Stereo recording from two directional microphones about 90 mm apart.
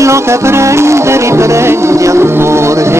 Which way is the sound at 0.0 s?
30° right (ahead or behind).